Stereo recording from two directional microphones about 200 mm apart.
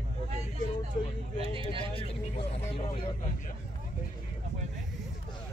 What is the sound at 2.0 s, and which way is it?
Speech, 30° left (ahead or behind).